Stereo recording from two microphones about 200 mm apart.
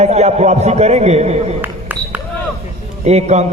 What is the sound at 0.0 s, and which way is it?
A man's voice, 35° right (ahead or behind).